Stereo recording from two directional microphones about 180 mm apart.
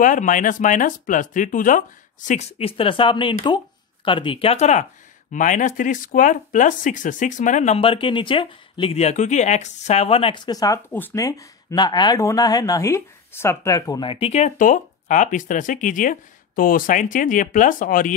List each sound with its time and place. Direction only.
0.0 s speech: 45° left (ahead or behind)